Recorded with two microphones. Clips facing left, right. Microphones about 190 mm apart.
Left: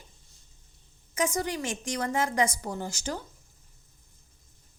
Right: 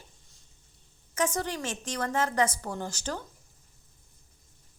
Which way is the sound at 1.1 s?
10° left (ahead or behind).